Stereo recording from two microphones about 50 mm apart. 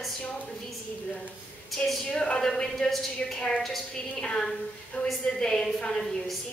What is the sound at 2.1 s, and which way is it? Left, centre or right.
Speech, centre.